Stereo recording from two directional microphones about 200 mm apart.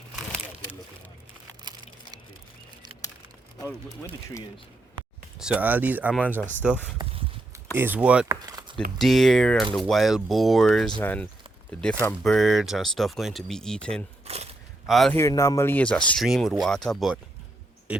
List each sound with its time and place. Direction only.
3.8 s speech: 10° left (ahead or behind)
5.4 s speech: 5° right (ahead or behind)
8.3 s a sound: 20° right (ahead or behind)
9.0 s speech: centre (ahead or behind)
14.3 s a sound: 30° right (ahead or behind)
14.8 s a man's voice: centre (ahead or behind)
15.1 s speech: 15° left (ahead or behind)